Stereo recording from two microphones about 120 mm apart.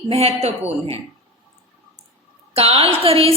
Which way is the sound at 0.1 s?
60° right (ahead or behind).